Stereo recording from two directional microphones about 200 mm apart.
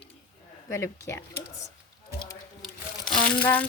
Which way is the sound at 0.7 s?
15° left (ahead or behind).